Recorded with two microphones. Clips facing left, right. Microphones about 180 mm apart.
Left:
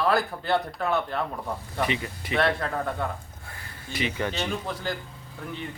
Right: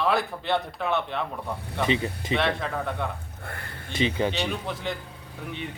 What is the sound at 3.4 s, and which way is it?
Speech, 60° right (ahead or behind).